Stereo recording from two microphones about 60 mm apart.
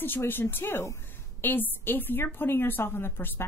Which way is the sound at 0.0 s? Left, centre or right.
Left.